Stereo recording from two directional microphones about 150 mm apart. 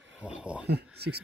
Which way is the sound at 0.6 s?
90° right.